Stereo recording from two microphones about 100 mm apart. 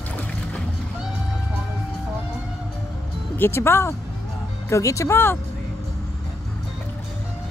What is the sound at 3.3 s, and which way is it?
Speech, 25° left (ahead or behind).